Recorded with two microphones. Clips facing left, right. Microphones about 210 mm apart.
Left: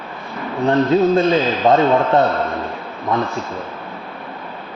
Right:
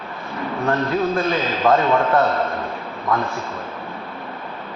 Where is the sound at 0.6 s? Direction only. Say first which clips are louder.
Left 7 dB; 25° left (ahead or behind).